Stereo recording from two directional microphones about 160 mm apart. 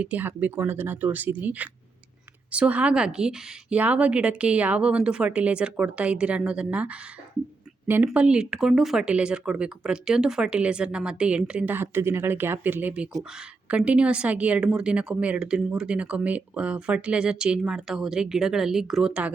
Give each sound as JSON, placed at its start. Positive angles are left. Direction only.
{"t": 0.0, "sound": "speech", "side_deg": -10}